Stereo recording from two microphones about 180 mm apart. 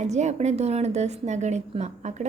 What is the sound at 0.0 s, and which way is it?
A woman's voice, 40° right (ahead or behind).